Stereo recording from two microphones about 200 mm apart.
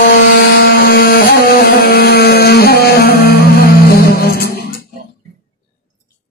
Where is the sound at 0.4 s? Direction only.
50° left (ahead or behind).